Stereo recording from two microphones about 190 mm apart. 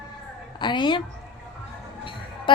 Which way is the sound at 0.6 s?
25° left (ahead or behind).